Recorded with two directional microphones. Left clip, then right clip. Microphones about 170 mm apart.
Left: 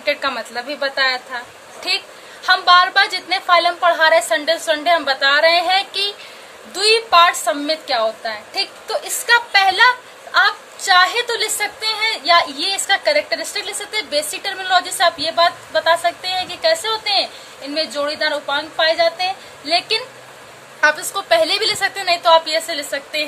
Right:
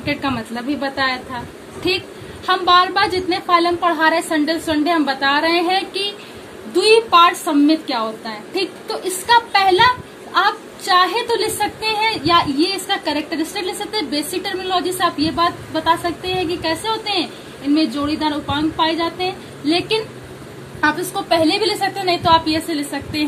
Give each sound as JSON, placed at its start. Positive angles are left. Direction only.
{"t": 0.0, "sound": "a woman's voice", "side_deg": 60}
{"t": 2.4, "sound": "a woman's voice", "side_deg": 60}